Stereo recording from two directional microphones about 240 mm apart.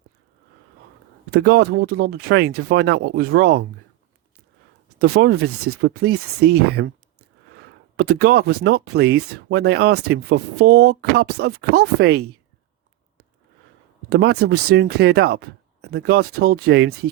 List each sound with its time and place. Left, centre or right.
1.4 s speech: right
4.9 s speech: right
7.9 s speech: right
14.1 s speech: right